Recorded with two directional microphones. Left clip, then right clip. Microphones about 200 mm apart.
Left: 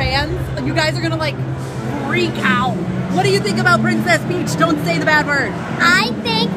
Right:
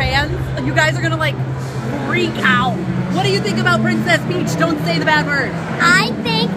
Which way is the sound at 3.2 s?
30° left (ahead or behind).